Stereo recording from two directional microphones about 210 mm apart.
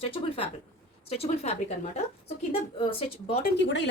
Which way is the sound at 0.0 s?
25° left (ahead or behind).